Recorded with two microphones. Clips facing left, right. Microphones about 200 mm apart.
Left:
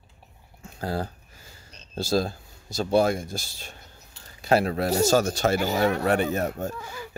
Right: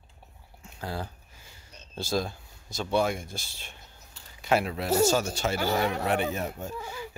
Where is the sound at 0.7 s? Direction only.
40° left (ahead or behind).